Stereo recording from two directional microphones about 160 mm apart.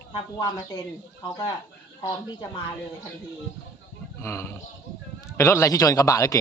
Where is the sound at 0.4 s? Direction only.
25° left (ahead or behind).